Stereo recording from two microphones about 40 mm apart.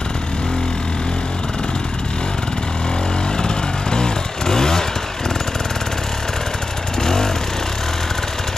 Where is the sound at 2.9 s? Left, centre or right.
Left.